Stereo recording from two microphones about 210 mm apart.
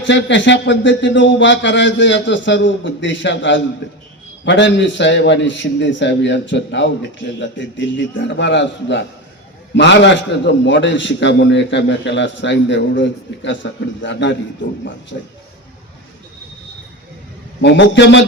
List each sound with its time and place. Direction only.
0.0 s a man's voice: 60° left (ahead or behind)
17.6 s a man's voice: 55° left (ahead or behind)